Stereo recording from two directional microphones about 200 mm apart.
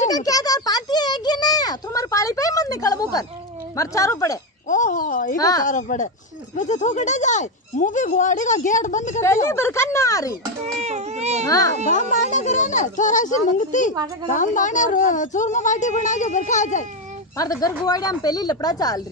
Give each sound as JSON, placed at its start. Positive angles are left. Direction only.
{"t": 0.1, "sound": "a sound", "side_deg": 20}
{"t": 3.7, "sound": "speech", "side_deg": 15}
{"t": 4.6, "sound": "a sound", "side_deg": 40}
{"t": 5.4, "sound": "speech", "side_deg": 20}
{"t": 5.7, "sound": "speech", "side_deg": 40}
{"t": 9.2, "sound": "speech", "side_deg": 15}
{"t": 10.6, "sound": "a child's voice", "side_deg": -35}
{"t": 11.4, "sound": "speech", "side_deg": 15}
{"t": 11.9, "sound": "speech", "side_deg": 40}
{"t": 17.4, "sound": "speech", "side_deg": 15}